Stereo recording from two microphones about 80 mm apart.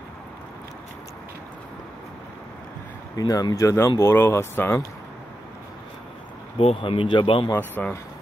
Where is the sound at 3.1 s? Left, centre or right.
Left.